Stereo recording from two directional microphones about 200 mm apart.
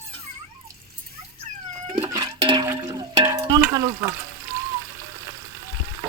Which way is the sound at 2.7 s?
20° right (ahead or behind).